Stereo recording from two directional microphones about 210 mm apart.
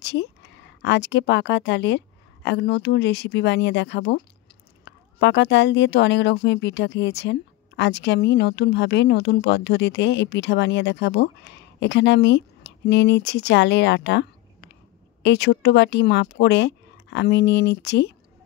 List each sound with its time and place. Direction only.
0.0 s speech: 55° left (ahead or behind)